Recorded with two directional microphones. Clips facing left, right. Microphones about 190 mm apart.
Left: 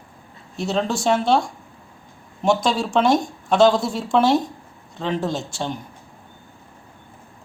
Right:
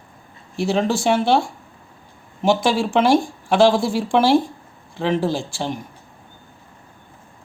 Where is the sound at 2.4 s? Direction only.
5° right (ahead or behind).